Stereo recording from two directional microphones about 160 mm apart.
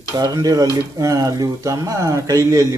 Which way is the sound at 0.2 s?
25° right (ahead or behind).